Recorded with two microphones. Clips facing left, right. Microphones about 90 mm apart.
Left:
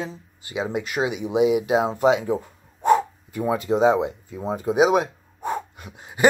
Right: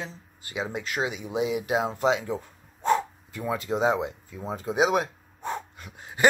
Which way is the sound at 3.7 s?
15° left (ahead or behind).